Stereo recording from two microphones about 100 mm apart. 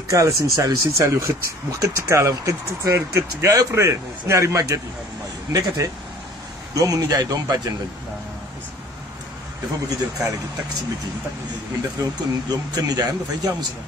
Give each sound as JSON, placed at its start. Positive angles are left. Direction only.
{"t": 0.1, "sound": "a man's voice", "side_deg": -35}
{"t": 9.8, "sound": "speech", "side_deg": -35}
{"t": 12.0, "sound": "speech", "side_deg": -40}